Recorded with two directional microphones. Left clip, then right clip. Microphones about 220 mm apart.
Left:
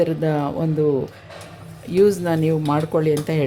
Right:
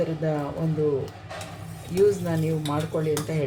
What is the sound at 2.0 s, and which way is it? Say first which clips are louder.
Speech: left 5 dB; 45° left (ahead or behind).